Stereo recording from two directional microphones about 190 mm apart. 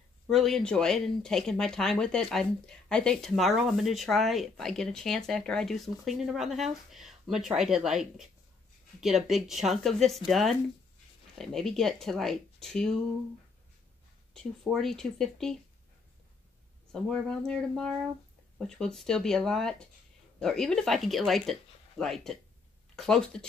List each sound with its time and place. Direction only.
0.3 s speech: centre (ahead or behind)
14.3 s speech: 5° left (ahead or behind)
16.9 s speech: 5° left (ahead or behind)